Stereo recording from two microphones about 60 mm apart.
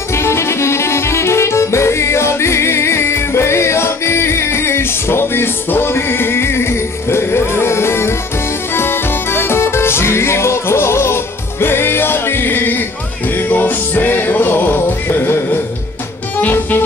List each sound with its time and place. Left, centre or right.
0.1 s music: left